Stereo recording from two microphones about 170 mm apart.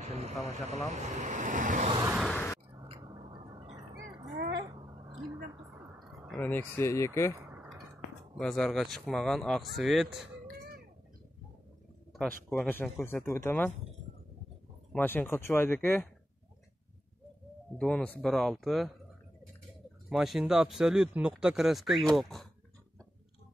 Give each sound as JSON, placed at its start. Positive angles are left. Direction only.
{"t": 0.0, "sound": "speech", "side_deg": -40}
{"t": 2.2, "sound": "a sound", "side_deg": 10}
{"t": 2.8, "sound": "a sound", "side_deg": -25}
{"t": 6.2, "sound": "speech", "side_deg": 5}
{"t": 6.8, "sound": "speech", "side_deg": 15}
{"t": 7.3, "sound": "a sound", "side_deg": -15}
{"t": 8.4, "sound": "a man's voice", "side_deg": 5}
{"t": 10.4, "sound": "a sound", "side_deg": -60}
{"t": 12.1, "sound": "speech", "side_deg": 5}
{"t": 14.9, "sound": "speech", "side_deg": 10}
{"t": 17.7, "sound": "a man's voice", "side_deg": 5}
{"t": 20.1, "sound": "a man's voice", "side_deg": 0}